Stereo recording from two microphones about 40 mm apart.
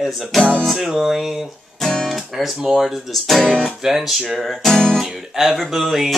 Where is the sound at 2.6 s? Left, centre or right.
Centre.